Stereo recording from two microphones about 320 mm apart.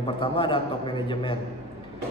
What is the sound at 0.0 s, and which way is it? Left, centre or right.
A man's voice, centre.